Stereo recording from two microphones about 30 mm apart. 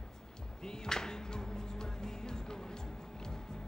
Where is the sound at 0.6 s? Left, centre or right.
Left.